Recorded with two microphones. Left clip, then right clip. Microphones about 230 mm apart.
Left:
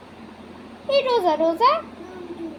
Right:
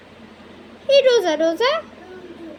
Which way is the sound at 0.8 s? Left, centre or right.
Right.